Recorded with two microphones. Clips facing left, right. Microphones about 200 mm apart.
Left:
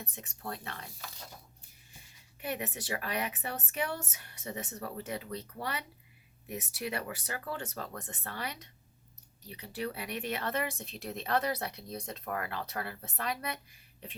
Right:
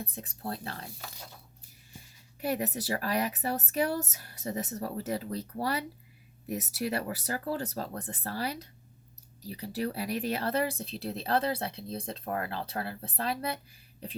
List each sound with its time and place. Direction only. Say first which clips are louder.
0.0 s speech: right 5 dB; 35° right (ahead or behind)
2.4 s speech: right 6 dB; 35° right (ahead or behind)